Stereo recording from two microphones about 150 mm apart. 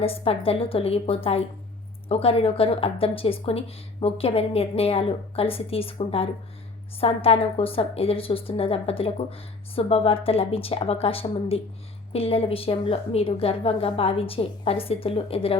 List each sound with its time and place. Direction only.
0.0 s a woman's voice: 40° left (ahead or behind)